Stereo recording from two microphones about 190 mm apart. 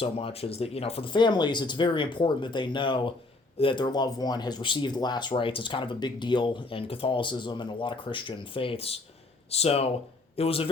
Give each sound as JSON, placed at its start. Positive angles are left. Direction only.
{"t": 0.0, "sound": "speech", "side_deg": 30}